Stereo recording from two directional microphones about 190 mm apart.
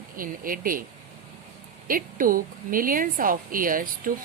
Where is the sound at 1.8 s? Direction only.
45° right (ahead or behind).